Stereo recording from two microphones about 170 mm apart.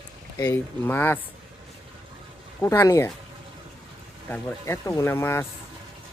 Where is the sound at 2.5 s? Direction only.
10° left (ahead or behind).